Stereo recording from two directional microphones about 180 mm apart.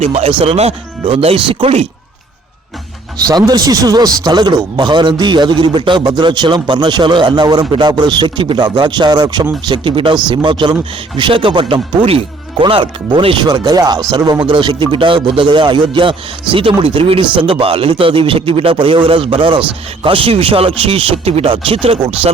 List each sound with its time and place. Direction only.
0.0 s speech: 35° right (ahead or behind)
3.2 s a man's voice: 20° right (ahead or behind)